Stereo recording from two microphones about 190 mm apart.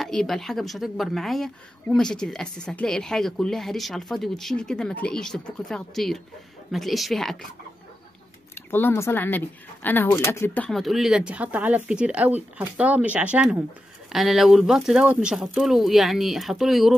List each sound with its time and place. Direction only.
0.0 s speech: centre (ahead or behind)
8.5 s speech: 10° left (ahead or behind)